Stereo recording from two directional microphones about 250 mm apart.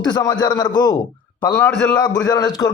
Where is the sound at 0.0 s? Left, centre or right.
Centre.